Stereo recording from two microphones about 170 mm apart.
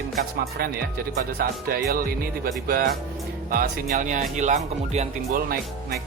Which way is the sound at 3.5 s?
55° right (ahead or behind).